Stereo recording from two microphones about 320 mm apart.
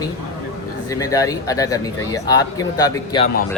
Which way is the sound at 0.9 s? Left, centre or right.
Centre.